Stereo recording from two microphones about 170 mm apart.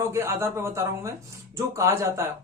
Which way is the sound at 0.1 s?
15° right (ahead or behind).